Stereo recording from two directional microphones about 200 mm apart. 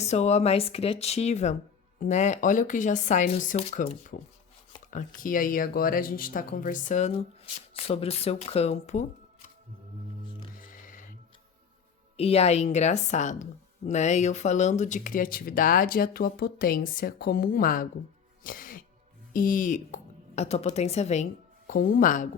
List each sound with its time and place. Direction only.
0.0 s a woman's voice: 35° left (ahead or behind)
10.6 s music: 40° left (ahead or behind)
12.1 s a woman's voice: 30° left (ahead or behind)
18.4 s throat clearing: 45° left (ahead or behind)
19.3 s speech: 45° left (ahead or behind)
21.7 s speech: 45° left (ahead or behind)